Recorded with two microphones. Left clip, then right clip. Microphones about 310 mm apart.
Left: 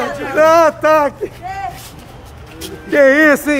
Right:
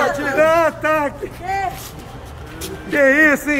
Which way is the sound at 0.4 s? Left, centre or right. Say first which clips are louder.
Left 6 dB; centre.